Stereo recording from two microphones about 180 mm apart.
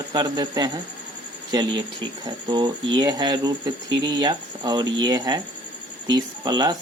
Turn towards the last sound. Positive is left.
turn(degrees=-20)  # may be behind; listen again after turning